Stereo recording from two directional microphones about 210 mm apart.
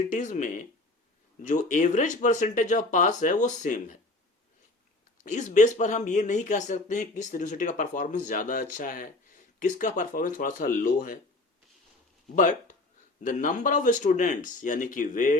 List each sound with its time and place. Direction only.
0.0 s a man's voice: 35° left (ahead or behind)
5.2 s a man's voice: 35° left (ahead or behind)
12.4 s a man's voice: 40° left (ahead or behind)